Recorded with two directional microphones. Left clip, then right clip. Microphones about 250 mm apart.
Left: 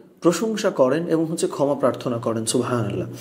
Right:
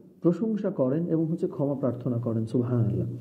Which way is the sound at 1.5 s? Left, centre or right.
Left.